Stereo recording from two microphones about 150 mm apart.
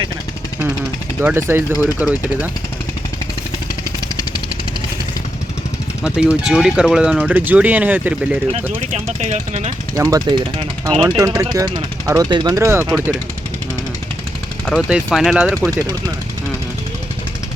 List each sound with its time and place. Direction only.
1.2 s speech: 15° right (ahead or behind)
6.0 s speech: 5° right (ahead or behind)
8.9 s speech: 50° right (ahead or behind)
9.9 s speech: 25° right (ahead or behind)
14.7 s speech: centre (ahead or behind)